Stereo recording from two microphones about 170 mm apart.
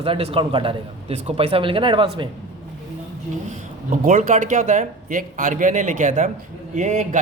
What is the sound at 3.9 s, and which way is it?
A man's voice, 50° right (ahead or behind).